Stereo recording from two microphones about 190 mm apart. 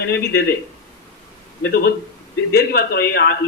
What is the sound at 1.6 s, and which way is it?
A man's voice, 55° left (ahead or behind).